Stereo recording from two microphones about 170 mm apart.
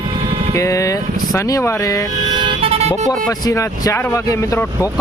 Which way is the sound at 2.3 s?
30° right (ahead or behind).